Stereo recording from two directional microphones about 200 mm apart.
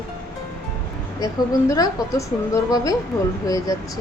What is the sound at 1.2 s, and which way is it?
A woman's voice, 20° left (ahead or behind).